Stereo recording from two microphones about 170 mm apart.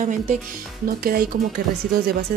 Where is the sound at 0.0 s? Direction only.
50° right (ahead or behind).